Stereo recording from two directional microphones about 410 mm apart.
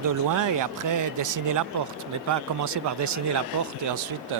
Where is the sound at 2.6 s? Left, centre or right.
Right.